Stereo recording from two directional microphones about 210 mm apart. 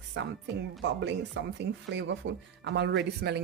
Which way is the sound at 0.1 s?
60° right (ahead or behind).